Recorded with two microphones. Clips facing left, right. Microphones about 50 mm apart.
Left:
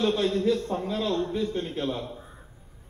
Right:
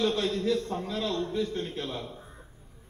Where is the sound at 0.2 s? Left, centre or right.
Centre.